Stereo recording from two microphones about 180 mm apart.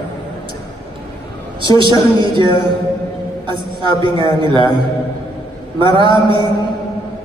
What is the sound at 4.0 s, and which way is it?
Speech, 30° right (ahead or behind).